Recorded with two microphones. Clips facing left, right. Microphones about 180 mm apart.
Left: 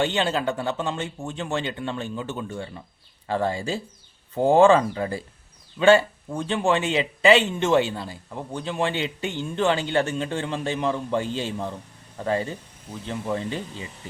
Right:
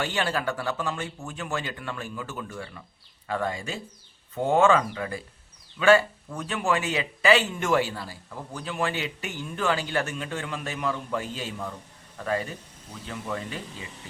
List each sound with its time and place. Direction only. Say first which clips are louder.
0.0 s speech: left 4 dB; 25° left (ahead or behind)